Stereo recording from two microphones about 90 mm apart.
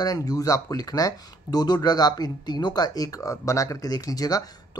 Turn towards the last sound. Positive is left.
turn(degrees=45)  # may be behind; listen again after turning